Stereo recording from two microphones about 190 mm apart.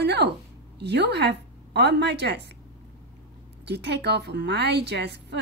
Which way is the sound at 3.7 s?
60° right (ahead or behind).